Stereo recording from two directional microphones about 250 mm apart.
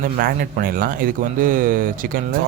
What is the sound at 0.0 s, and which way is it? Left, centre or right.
A man's voice, right.